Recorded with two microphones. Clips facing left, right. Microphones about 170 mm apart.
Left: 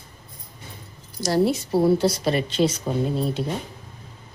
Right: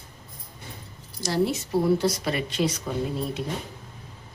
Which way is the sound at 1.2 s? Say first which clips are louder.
Left 4 dB; 40° left (ahead or behind).